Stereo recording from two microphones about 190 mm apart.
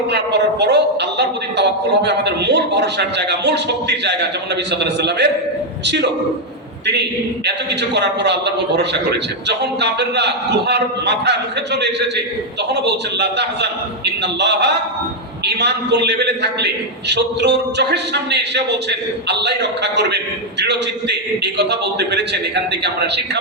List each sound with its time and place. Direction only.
0.6 s a man's voice: 60° right (ahead or behind)
7.4 s a man's voice: 65° right (ahead or behind)